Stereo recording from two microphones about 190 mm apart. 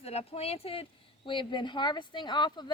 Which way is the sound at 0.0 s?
30° left (ahead or behind).